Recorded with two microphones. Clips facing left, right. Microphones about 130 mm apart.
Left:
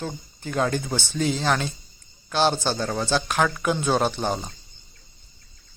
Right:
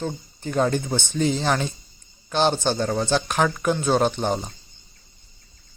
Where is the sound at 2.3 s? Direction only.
5° left (ahead or behind).